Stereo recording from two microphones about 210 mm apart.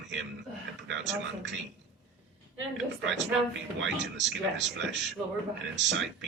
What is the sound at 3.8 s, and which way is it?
A man's voice, 60° right (ahead or behind).